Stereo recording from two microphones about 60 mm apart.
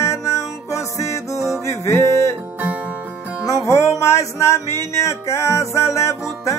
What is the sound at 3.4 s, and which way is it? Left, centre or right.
Music, left.